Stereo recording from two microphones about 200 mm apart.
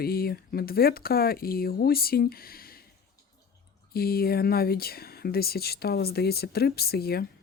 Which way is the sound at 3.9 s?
50° left (ahead or behind).